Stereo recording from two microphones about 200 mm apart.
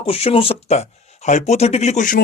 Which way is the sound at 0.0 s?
30° left (ahead or behind).